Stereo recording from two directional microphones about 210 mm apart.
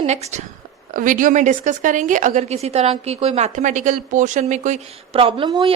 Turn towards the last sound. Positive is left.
turn(degrees=-20)  # may be behind; listen again after turning